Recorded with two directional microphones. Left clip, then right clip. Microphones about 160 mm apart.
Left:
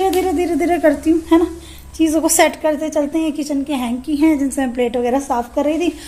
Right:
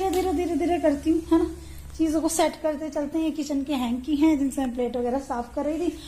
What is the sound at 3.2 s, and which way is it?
A woman's voice, centre (ahead or behind).